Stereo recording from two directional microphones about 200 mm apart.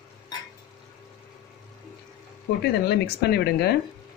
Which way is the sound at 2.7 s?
55° left (ahead or behind).